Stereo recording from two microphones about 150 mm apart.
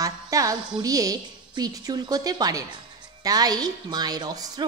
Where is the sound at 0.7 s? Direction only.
25° right (ahead or behind).